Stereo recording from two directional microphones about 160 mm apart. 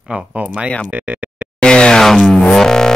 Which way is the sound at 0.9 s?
10° right (ahead or behind).